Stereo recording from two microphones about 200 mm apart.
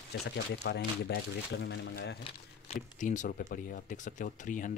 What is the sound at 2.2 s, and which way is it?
Speech, 35° left (ahead or behind).